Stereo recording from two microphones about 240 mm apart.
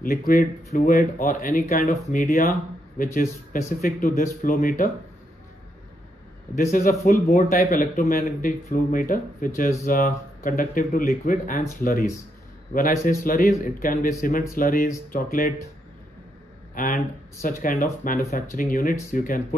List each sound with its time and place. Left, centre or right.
0.0 s speech: left
3.8 s speech: left
6.5 s speech: left
16.7 s speech: left